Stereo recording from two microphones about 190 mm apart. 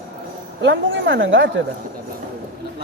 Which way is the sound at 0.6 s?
70° right (ahead or behind).